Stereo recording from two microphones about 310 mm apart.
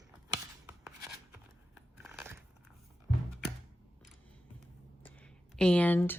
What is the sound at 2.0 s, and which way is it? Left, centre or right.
Scissors, centre.